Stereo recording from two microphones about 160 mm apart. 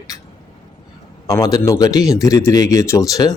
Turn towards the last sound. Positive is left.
turn(degrees=20)  # may be behind; listen again after turning